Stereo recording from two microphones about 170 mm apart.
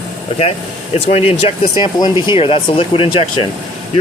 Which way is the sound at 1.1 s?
40° left (ahead or behind).